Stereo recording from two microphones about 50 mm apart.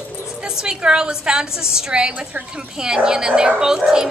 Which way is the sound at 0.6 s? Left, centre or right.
Centre.